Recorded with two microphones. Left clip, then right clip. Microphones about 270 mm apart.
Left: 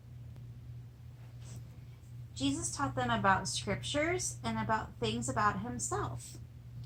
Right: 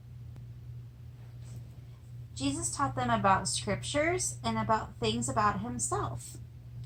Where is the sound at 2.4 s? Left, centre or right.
Centre.